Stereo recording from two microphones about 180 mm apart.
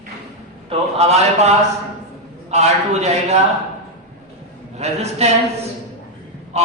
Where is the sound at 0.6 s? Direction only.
35° right (ahead or behind).